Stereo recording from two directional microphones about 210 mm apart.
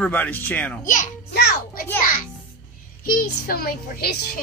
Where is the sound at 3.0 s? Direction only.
45° left (ahead or behind).